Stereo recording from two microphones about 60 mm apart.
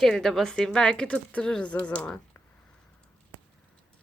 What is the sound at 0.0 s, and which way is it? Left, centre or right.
A woman's voice, centre.